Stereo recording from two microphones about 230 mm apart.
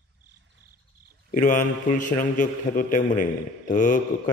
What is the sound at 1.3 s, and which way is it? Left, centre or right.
A man's voice, left.